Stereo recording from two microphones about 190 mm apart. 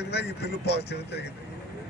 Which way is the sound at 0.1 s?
60° left (ahead or behind).